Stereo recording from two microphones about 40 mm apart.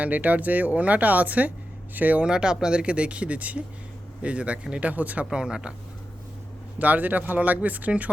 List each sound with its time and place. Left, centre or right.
0.0 s speech: right
2.2 s speech: centre; by 5.2 s right
5.2 s speech: right
6.7 s speech: right